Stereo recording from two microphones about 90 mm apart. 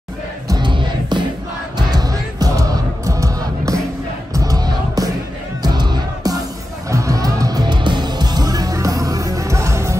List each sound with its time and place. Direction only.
0.6 s music: 60° right (ahead or behind)
1.8 s music: 45° right (ahead or behind)
6.9 s music: 35° right (ahead or behind)